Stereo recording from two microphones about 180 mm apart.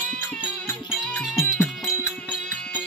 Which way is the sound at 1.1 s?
Centre (ahead or behind).